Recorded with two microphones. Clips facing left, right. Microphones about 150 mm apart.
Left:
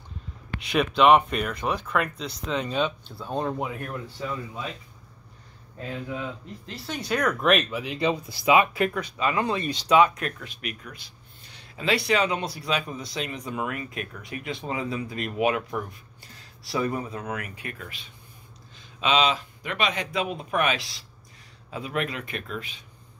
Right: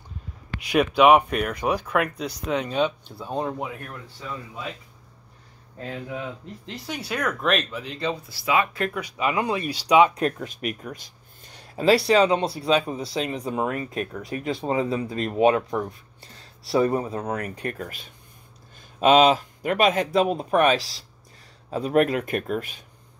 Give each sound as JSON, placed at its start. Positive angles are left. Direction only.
{"t": 0.6, "sound": "speech", "side_deg": -10}
{"t": 6.6, "sound": "speech", "side_deg": -20}
{"t": 7.0, "sound": "speech", "side_deg": -5}
{"t": 8.9, "sound": "speech", "side_deg": -15}
{"t": 10.1, "sound": "speech", "side_deg": -40}